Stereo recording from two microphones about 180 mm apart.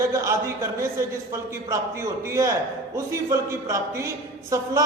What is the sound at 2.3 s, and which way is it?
A man's voice, 15° right (ahead or behind).